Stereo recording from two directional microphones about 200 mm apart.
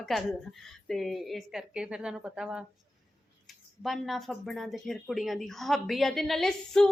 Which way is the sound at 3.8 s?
Centre (ahead or behind).